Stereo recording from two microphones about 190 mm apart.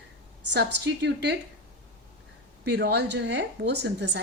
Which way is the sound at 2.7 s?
65° right (ahead or behind).